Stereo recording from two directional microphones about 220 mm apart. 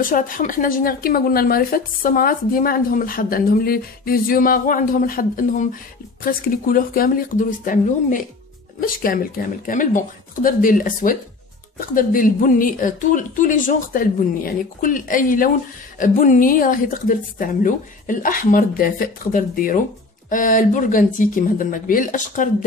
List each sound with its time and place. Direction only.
0.0 s speech: 40° left (ahead or behind)